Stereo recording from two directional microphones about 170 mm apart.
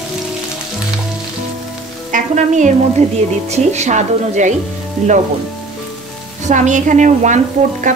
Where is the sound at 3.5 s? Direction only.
40° right (ahead or behind).